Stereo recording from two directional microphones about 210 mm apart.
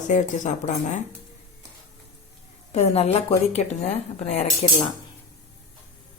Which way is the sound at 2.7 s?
30° left (ahead or behind).